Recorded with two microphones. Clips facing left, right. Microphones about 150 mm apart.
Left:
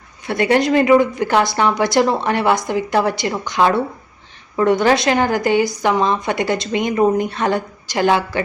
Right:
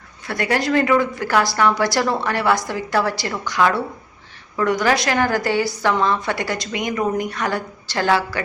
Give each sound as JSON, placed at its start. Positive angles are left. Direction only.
{"t": 0.3, "sound": "a woman's voice", "side_deg": 20}